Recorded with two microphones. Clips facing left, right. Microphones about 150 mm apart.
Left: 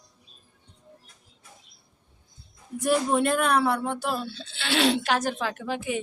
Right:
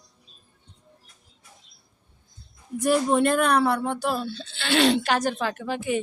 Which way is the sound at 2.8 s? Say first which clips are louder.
Right 2 dB; centre (ahead or behind).